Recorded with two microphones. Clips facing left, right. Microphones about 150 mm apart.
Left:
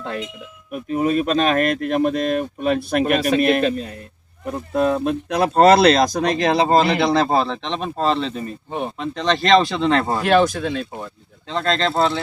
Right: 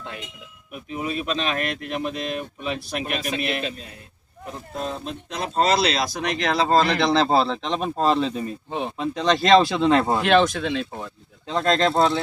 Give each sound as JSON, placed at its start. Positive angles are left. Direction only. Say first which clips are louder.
{"t": 0.7, "sound": "speech", "louder": "left 9 dB", "side_deg": 45}
{"t": 4.5, "sound": "speech", "louder": "left 11 dB", "side_deg": 60}
{"t": 6.1, "sound": "speech", "louder": "left 5 dB", "side_deg": 35}
{"t": 6.7, "sound": "speech", "louder": "left 3 dB", "side_deg": 15}
{"t": 7.3, "sound": "speech", "louder": "even", "side_deg": -5}
{"t": 11.4, "sound": "speech", "louder": "right 1 dB", "side_deg": -5}